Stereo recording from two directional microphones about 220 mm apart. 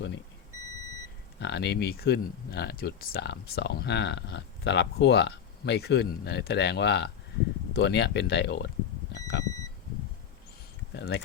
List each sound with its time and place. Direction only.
1.4 s speech: 50° left (ahead or behind)
10.9 s speech: 50° left (ahead or behind)